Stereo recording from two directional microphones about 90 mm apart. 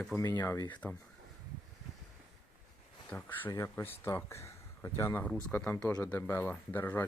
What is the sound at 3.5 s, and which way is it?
Speech, 35° left (ahead or behind).